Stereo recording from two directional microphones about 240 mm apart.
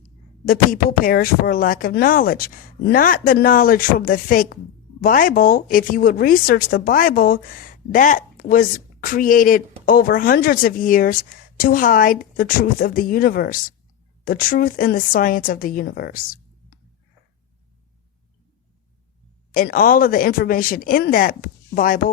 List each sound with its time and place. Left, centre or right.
0.4 s a woman's voice: left
19.5 s a woman's voice: left